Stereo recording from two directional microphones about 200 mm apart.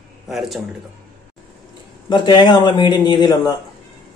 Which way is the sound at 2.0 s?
25° left (ahead or behind).